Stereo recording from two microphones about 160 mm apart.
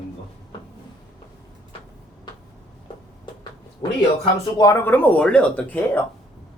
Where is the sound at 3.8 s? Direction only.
30° left (ahead or behind); by 6.0 s 10° left (ahead or behind).